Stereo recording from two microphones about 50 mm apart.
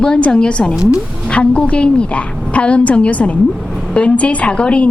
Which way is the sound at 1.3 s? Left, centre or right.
Left.